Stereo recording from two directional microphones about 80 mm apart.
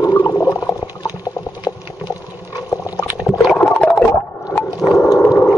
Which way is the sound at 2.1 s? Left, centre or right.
Left.